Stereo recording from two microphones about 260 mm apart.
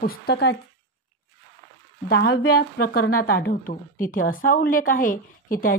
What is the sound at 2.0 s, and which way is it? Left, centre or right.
A woman's voice, left.